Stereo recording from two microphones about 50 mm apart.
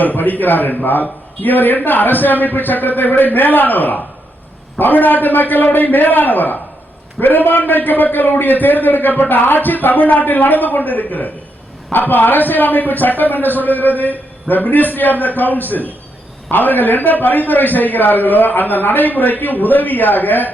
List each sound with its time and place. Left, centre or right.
0.0 s a man's voice: left